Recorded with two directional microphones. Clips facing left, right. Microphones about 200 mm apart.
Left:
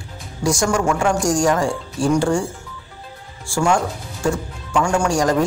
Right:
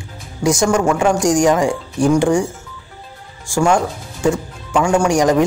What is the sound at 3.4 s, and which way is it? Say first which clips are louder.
Speech: right 3 dB; 20° right (ahead or behind).